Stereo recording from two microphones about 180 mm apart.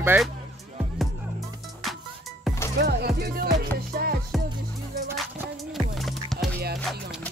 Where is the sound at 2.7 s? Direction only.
60° right (ahead or behind).